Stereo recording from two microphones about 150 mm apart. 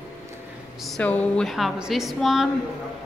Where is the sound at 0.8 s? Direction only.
5° left (ahead or behind).